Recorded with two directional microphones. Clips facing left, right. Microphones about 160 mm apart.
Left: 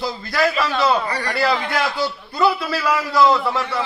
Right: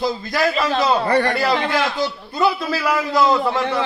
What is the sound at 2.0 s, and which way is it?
Speech, 15° right (ahead or behind).